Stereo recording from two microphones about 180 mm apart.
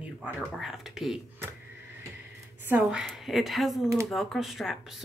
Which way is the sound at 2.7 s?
5° right (ahead or behind).